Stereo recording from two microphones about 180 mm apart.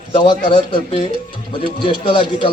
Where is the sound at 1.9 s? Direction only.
25° left (ahead or behind).